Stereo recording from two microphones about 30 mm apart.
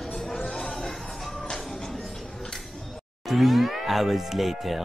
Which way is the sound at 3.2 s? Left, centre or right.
Centre.